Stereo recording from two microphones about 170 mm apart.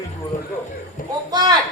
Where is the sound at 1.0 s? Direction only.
50° left (ahead or behind).